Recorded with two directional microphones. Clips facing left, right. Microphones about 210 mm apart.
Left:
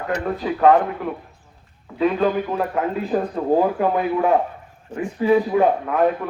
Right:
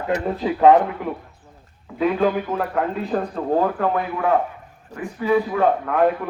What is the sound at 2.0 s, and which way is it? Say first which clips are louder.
A man's voice: even; centre (ahead or behind).